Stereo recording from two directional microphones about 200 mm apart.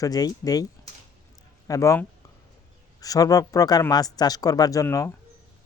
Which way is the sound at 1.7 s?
15° left (ahead or behind).